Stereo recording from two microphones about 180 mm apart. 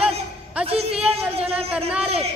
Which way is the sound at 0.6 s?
35° right (ahead or behind).